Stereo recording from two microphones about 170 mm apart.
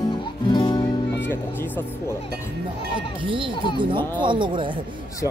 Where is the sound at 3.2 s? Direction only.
30° right (ahead or behind).